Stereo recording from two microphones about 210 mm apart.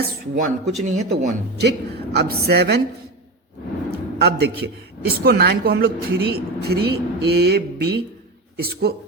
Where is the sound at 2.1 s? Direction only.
50° right (ahead or behind).